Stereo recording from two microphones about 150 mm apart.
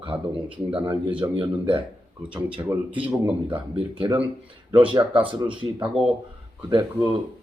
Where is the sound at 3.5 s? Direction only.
30° right (ahead or behind).